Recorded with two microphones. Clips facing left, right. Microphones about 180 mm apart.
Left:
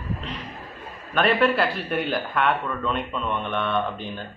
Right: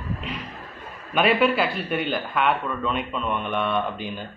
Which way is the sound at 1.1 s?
5° right (ahead or behind).